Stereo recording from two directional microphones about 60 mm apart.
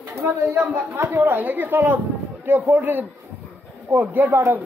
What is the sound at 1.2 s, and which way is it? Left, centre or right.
Speech, right.